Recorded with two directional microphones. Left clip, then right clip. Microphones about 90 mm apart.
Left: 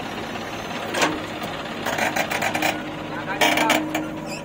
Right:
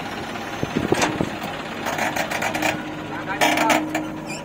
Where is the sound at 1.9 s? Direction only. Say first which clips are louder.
Left 1 dB; 55° left (ahead or behind).